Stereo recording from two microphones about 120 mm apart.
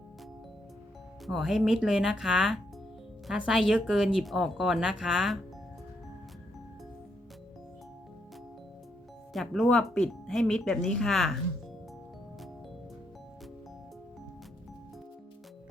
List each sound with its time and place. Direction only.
1.3 s speech: 5° right (ahead or behind)
9.3 s speech: centre (ahead or behind)